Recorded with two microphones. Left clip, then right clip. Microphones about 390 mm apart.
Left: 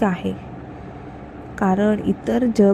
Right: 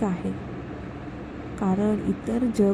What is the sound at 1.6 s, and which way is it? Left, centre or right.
Speech, centre.